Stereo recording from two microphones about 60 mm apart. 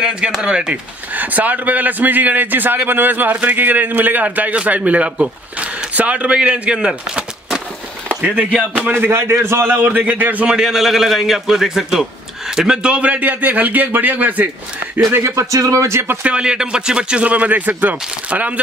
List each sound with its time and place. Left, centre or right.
0.0 s speech: centre
1.1 s a man's voice: right
8.9 s speech: right
9.7 s speech: right
10.4 s a man's voice: centre; by 14.5 s right
15.0 s speech: right
15.5 s speech: right
15.9 s speech: right
16.2 s speech: centre